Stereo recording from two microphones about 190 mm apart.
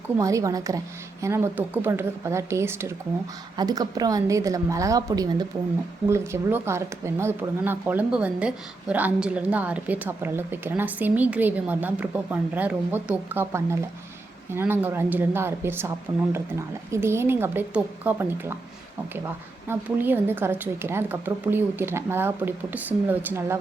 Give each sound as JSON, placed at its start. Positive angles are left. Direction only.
{"t": 0.2, "sound": "a woman's voice", "side_deg": -15}
{"t": 16.9, "sound": "speech", "side_deg": -15}
{"t": 19.6, "sound": "speech", "side_deg": -10}